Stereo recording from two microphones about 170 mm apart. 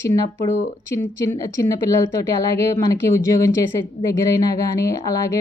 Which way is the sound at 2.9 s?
15° left (ahead or behind).